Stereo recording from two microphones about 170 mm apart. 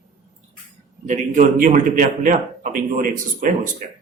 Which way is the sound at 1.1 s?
50° right (ahead or behind).